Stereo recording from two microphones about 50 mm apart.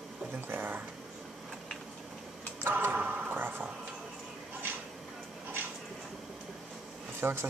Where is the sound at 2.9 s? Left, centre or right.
Right.